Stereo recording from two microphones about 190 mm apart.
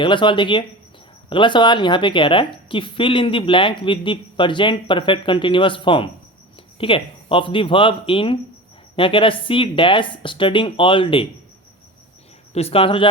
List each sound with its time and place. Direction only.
0.0 s a woman's voice: 25° left (ahead or behind)
12.5 s a woman's voice: 30° left (ahead or behind)